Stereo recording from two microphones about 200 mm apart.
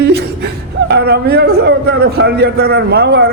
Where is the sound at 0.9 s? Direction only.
55° right (ahead or behind).